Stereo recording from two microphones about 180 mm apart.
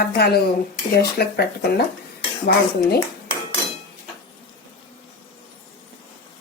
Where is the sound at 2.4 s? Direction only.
65° left (ahead or behind).